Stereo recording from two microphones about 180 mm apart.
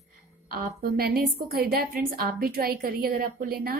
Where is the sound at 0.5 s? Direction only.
55° right (ahead or behind).